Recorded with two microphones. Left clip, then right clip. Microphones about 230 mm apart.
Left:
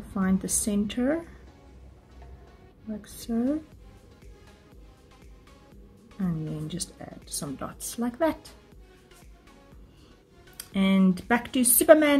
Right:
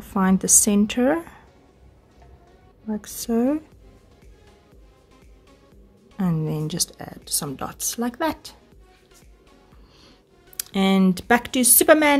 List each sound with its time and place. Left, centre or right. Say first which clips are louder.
0.1 s a woman's voice: right 10 dB; right
3.0 s speech: right 7 dB; right
6.1 s speech: right 7 dB; right
10.6 s speech: right 5 dB; right